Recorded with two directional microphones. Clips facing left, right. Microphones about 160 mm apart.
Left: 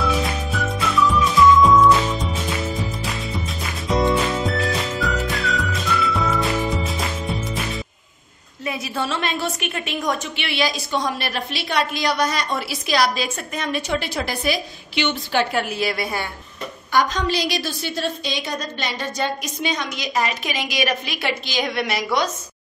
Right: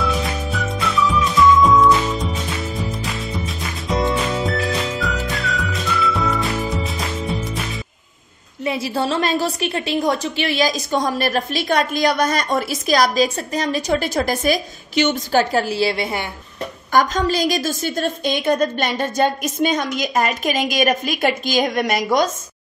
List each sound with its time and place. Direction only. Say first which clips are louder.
0.0 s music: even; centre (ahead or behind)
8.6 s a woman's voice: right 5 dB; 30° right (ahead or behind)
16.9 s a woman's voice: right 3 dB; 45° right (ahead or behind)